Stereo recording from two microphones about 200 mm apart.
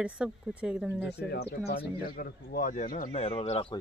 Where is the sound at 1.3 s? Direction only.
55° left (ahead or behind).